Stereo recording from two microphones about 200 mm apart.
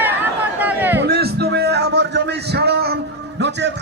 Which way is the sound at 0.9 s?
55° right (ahead or behind).